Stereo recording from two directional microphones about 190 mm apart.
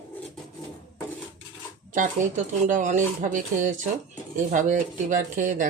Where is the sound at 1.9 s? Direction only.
40° right (ahead or behind).